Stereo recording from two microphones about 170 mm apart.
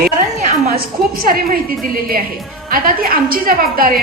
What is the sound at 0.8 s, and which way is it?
Speech, 60° right (ahead or behind).